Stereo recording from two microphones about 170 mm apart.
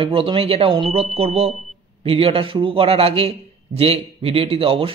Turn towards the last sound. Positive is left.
turn(degrees=-35)  # may be behind; listen again after turning